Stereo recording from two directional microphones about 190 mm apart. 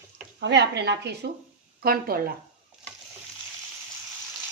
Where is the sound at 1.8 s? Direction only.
50° right (ahead or behind).